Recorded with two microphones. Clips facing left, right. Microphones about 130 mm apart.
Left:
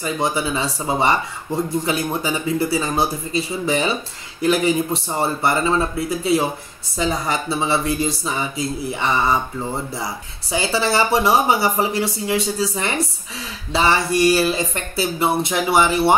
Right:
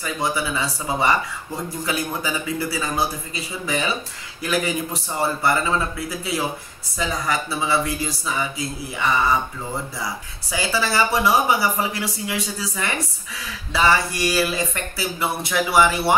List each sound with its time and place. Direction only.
0.0 s speech: 25° left (ahead or behind)